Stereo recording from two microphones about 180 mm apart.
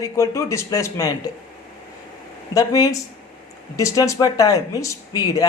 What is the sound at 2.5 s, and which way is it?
Speech, 20° left (ahead or behind).